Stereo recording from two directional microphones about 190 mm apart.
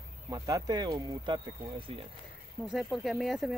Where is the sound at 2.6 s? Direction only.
Centre (ahead or behind).